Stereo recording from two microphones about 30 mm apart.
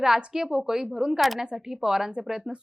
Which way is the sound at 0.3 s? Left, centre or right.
Centre.